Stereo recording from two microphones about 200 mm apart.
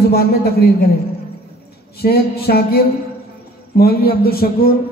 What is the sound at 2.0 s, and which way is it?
A man's voice, 50° left (ahead or behind).